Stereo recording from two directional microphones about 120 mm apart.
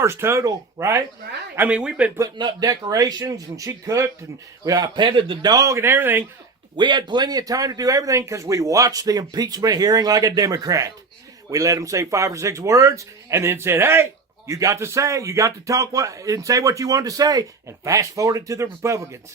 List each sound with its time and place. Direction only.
0.0 s a man's voice: 20° right (ahead or behind)
1.5 s speech: 10° right (ahead or behind)
2.1 s a man's voice: 30° right (ahead or behind)
5.5 s a man's voice: 25° right (ahead or behind)
6.7 s a man's voice: 40° right (ahead or behind)